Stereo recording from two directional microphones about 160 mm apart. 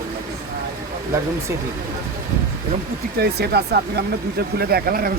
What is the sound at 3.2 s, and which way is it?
Speech, 90° right.